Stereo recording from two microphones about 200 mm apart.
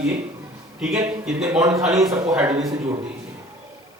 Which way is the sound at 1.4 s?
15° right (ahead or behind).